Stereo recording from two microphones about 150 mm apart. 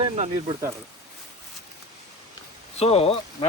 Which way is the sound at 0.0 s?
40° right (ahead or behind).